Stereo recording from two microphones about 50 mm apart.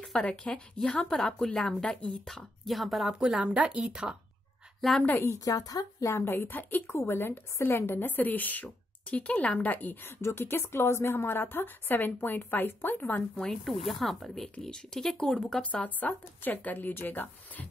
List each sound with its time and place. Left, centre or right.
0.2 s speech: centre
2.0 s speech: left
2.2 s speech: centre
3.2 s speech: centre
4.8 s speech: centre
6.0 s speech: left
6.3 s a woman's voice: left
6.9 s a woman's voice: left
10.0 s a woman's voice: left
13.4 s speech: centre
13.8 s speech: centre
15.7 s speech: left
16.1 s speech: left